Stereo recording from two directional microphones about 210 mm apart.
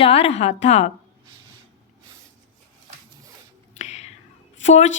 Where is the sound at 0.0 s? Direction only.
30° left (ahead or behind).